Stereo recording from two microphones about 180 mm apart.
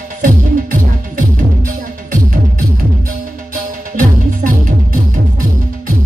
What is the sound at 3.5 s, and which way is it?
Music, 50° right (ahead or behind).